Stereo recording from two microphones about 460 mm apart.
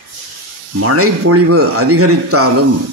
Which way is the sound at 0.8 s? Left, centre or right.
Right.